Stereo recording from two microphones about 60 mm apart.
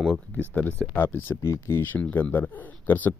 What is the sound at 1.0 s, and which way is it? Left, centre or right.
Speech, left.